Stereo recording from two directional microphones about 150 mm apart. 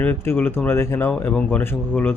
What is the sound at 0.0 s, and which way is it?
Speech, 10° left (ahead or behind).